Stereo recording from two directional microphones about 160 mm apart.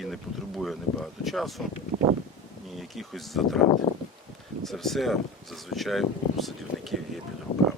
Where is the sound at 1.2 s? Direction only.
Centre (ahead or behind).